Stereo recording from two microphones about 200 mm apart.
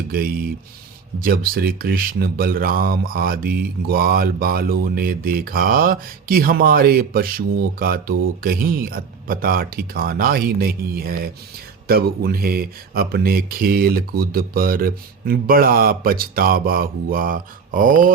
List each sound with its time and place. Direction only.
0.1 s speech: 45° right (ahead or behind)